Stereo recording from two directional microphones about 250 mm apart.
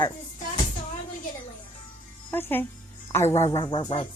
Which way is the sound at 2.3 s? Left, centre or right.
Centre.